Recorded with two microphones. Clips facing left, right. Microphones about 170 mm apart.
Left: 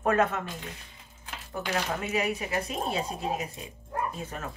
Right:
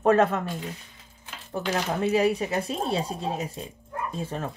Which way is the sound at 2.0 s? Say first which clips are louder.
Right 7 dB; 30° right (ahead or behind).